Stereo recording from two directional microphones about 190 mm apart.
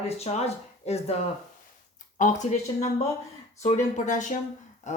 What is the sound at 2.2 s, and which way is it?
Speech, 40° left (ahead or behind).